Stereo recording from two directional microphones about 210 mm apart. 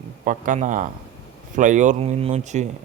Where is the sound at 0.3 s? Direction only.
40° right (ahead or behind).